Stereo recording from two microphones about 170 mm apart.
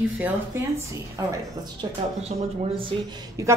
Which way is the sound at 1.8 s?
25° right (ahead or behind).